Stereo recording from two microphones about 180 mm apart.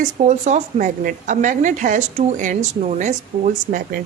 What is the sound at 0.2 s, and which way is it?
A woman's voice, 40° right (ahead or behind).